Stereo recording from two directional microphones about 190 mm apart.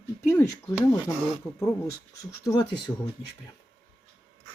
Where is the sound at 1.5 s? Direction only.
Centre (ahead or behind).